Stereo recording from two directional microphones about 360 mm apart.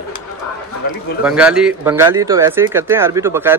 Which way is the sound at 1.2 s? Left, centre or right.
Centre.